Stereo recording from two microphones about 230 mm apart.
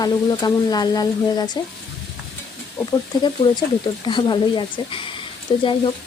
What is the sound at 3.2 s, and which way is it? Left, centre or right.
Speech, centre.